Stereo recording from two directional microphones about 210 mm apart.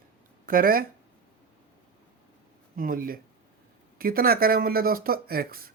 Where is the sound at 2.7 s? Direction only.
40° right (ahead or behind).